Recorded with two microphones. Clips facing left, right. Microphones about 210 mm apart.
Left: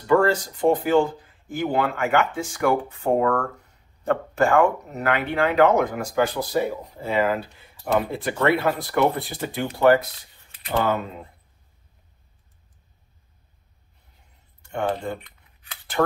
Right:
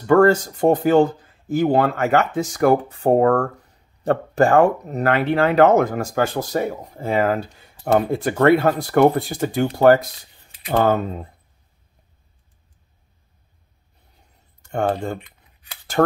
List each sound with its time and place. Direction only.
0.0 s speech: 45° right (ahead or behind)
14.6 s speech: 45° right (ahead or behind)